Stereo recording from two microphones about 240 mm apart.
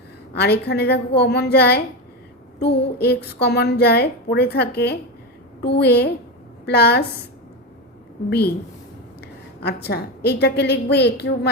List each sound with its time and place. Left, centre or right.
0.3 s a woman's voice: left
9.2 s a woman's voice: left